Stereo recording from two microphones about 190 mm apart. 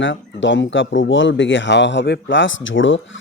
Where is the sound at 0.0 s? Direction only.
75° left (ahead or behind).